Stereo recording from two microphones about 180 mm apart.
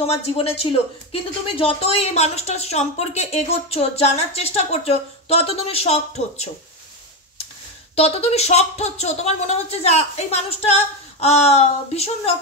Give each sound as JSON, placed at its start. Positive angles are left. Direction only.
{"t": 0.0, "sound": "a woman's voice", "side_deg": 35}
{"t": 7.9, "sound": "a woman's voice", "side_deg": 35}